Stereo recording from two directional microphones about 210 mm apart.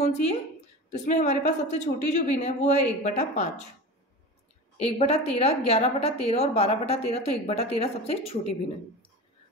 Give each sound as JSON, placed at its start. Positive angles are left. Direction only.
{"t": 0.0, "sound": "a woman's voice", "side_deg": 30}
{"t": 4.9, "sound": "a woman's voice", "side_deg": 30}